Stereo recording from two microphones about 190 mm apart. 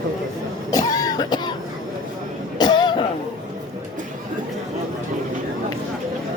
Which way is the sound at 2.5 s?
20° left (ahead or behind).